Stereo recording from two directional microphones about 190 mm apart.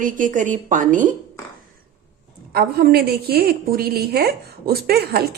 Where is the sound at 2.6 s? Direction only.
55° right (ahead or behind).